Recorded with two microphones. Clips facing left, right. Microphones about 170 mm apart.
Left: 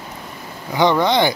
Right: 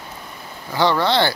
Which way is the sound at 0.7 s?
15° left (ahead or behind).